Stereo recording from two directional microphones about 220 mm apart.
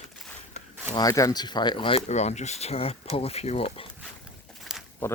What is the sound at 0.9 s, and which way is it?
Speech, 15° left (ahead or behind).